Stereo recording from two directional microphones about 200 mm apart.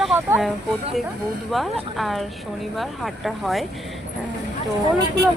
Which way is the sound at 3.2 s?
Centre (ahead or behind).